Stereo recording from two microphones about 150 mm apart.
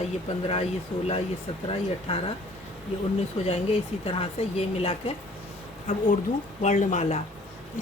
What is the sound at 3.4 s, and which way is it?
A woman's voice, 40° left (ahead or behind).